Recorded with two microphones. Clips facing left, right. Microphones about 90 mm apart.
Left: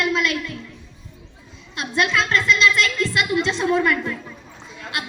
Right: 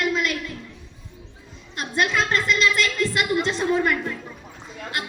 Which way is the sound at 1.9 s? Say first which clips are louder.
Left 2 dB; 45° right (ahead or behind).